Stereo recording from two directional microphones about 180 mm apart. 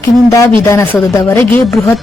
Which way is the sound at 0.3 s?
15° left (ahead or behind).